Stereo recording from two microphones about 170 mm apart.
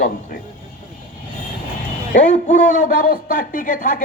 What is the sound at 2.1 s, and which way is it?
A man's voice, 50° left (ahead or behind).